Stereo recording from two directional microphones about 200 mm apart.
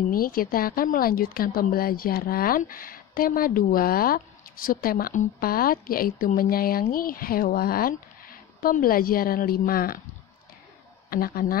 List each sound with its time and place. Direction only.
0.1 s speech: 45° left (ahead or behind)
11.1 s speech: 45° left (ahead or behind)